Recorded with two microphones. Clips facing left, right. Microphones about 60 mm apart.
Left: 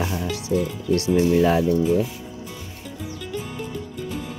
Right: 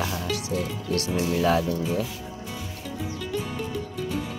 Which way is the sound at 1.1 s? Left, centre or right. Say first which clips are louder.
Left 4 dB; centre.